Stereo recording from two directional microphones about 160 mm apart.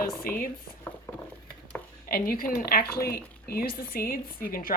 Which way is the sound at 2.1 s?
65° left (ahead or behind).